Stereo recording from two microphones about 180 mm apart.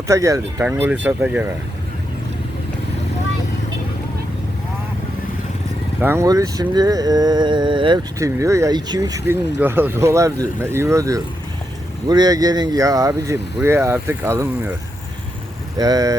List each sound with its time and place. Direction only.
0.1 s speech: 15° right (ahead or behind)
6.0 s speech: 15° right (ahead or behind)
15.8 s speech: 20° right (ahead or behind)